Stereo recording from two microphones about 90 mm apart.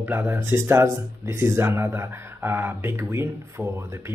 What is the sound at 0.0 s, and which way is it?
Speech, 20° right (ahead or behind).